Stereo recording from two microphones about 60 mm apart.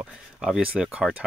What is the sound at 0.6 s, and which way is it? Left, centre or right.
Speech, right.